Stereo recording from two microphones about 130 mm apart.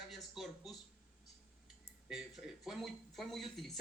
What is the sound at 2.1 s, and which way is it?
Speech, 5° right (ahead or behind).